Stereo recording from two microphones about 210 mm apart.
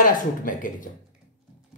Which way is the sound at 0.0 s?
40° left (ahead or behind).